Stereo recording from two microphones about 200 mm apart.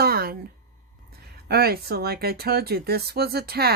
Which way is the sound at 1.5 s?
50° right (ahead or behind).